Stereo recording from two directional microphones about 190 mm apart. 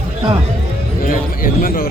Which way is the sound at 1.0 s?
50° left (ahead or behind).